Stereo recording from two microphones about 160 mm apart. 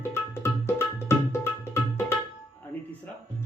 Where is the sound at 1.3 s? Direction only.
15° left (ahead or behind).